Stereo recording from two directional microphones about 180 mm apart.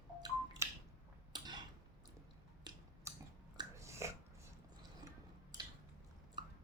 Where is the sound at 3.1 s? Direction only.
15° right (ahead or behind).